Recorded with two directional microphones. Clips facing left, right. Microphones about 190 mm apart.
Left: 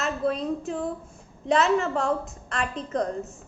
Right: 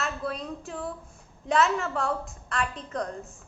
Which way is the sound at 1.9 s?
35° left (ahead or behind).